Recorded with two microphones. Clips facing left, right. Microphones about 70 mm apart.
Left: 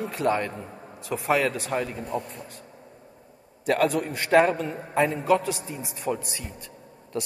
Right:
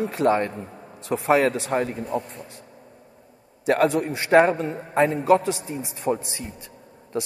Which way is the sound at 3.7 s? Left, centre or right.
Right.